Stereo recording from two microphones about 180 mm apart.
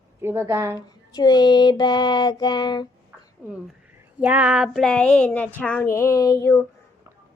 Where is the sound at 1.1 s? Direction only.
20° left (ahead or behind).